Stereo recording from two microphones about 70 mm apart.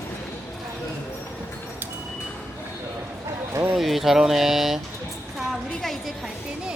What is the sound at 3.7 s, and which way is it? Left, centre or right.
Speech, centre.